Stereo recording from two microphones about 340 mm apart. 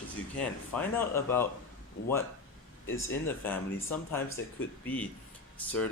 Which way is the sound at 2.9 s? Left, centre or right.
Left.